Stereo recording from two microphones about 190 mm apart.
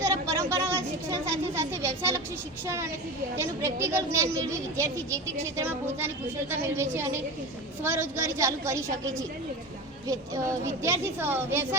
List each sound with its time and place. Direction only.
0.0 s a sound: 15° right (ahead or behind)
2.6 s speech: 15° right (ahead or behind)
3.9 s speech: 15° right (ahead or behind)
10.1 s speech: 15° right (ahead or behind)